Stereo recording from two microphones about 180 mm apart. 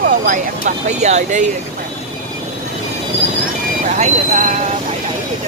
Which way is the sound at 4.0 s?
45° right (ahead or behind).